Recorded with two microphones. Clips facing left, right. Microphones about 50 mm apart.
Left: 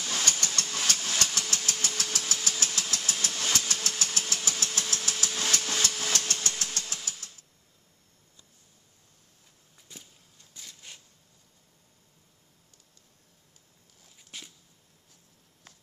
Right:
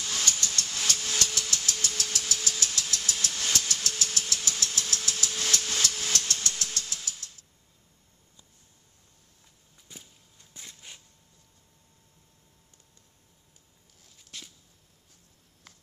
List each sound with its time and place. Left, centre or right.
0.0 s vehicle: left
0.5 s engine: left
1.7 s vehicle: left
3.1 s train: left
4.0 s engine: left
4.5 s hammer: left
9.9 s a sound: centre
10.5 s a sound: right
14.1 s a sound: centre